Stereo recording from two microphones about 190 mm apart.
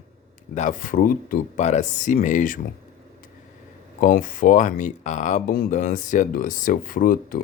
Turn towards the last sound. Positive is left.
turn(degrees=50)  # may be behind; listen again after turning